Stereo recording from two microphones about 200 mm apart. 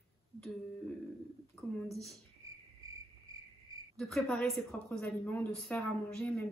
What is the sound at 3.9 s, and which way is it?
Speech, centre (ahead or behind).